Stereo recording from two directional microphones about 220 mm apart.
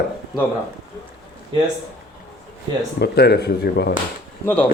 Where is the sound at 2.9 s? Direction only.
45° left (ahead or behind).